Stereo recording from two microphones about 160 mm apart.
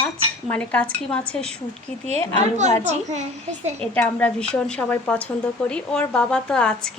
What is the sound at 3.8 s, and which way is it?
A woman's voice, 10° left (ahead or behind).